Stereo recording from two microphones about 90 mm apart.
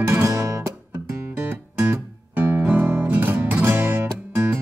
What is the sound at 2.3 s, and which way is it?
Guitar, 20° right (ahead or behind).